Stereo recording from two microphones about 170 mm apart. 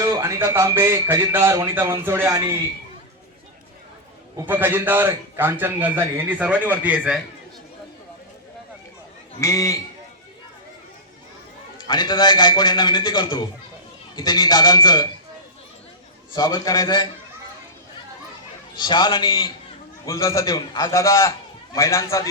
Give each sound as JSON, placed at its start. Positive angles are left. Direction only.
{"t": 0.0, "sound": "a man's voice", "side_deg": -20}
{"t": 4.4, "sound": "a man's voice", "side_deg": -10}
{"t": 9.4, "sound": "a man's voice", "side_deg": 20}
{"t": 11.8, "sound": "a man's voice", "side_deg": 25}
{"t": 16.3, "sound": "a man's voice", "side_deg": 25}
{"t": 18.8, "sound": "a man's voice", "side_deg": 25}